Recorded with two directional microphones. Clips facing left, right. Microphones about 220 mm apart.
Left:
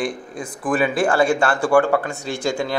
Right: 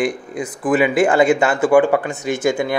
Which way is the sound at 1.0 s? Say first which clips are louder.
Right 3 dB; 20° right (ahead or behind).